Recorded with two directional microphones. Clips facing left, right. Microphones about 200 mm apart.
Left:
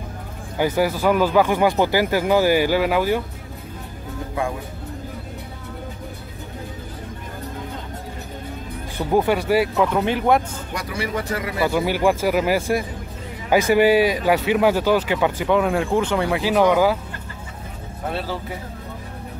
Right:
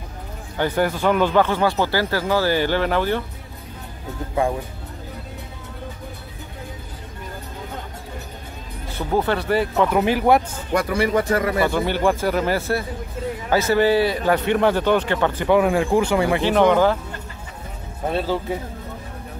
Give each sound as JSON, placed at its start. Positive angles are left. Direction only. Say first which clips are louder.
{"t": 0.6, "sound": "speech", "louder": "left 1 dB", "side_deg": 5}
{"t": 8.9, "sound": "speech", "louder": "left 2 dB", "side_deg": 10}
{"t": 9.9, "sound": "speech", "louder": "right 3 dB", "side_deg": -5}
{"t": 10.7, "sound": "speech", "louder": "right 8 dB", "side_deg": -55}
{"t": 11.6, "sound": "speech", "louder": "left 1 dB", "side_deg": 5}
{"t": 15.4, "sound": "speech", "louder": "right 5 dB", "side_deg": 0}